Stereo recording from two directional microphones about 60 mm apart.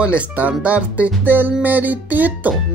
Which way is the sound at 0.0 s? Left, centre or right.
Right.